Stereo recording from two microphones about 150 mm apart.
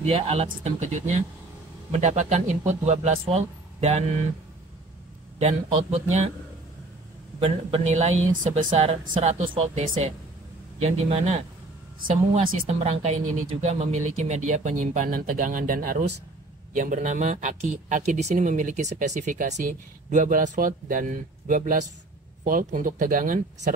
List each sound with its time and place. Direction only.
0.0 s speech: 45° right (ahead or behind)
5.4 s speech: 50° right (ahead or behind)
7.3 s speech: 40° right (ahead or behind); by 16.1 s 70° right (ahead or behind)
16.7 s speech: 60° right (ahead or behind)